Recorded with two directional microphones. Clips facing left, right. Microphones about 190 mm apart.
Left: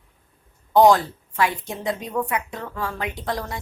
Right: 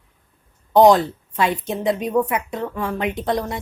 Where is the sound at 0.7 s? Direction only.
20° right (ahead or behind).